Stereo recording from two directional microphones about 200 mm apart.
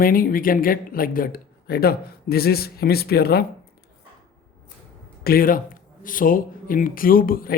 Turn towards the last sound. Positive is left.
turn(degrees=45)  # may be behind; listen again after turning